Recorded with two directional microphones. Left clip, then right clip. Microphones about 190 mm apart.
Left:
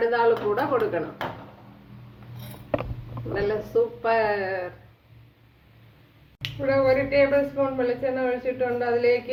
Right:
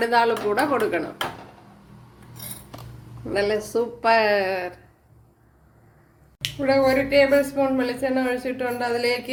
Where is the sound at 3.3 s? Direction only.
45° right (ahead or behind).